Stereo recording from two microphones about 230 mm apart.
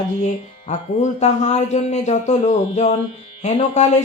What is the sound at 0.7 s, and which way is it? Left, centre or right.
A man's voice, left.